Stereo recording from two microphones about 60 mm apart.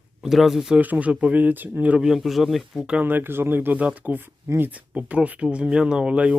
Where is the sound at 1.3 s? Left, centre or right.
Right.